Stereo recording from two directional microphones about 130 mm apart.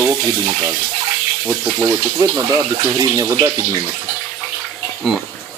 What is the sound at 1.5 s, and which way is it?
Speech, 25° right (ahead or behind).